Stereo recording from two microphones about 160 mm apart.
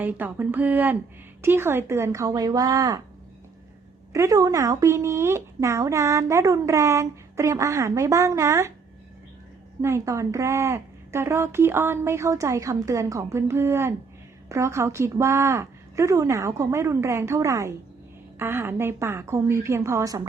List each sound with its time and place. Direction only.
0.0 s speech: 10° right (ahead or behind)
4.1 s speech: 20° right (ahead or behind)
9.8 s speech: 20° right (ahead or behind)